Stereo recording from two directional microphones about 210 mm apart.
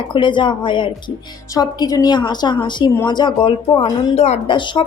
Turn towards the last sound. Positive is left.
turn(degrees=25)  # may be behind; listen again after turning